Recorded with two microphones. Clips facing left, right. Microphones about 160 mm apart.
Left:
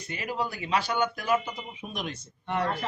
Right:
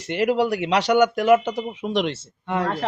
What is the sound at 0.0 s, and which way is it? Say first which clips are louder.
Speech: right 12 dB; 75° right (ahead or behind).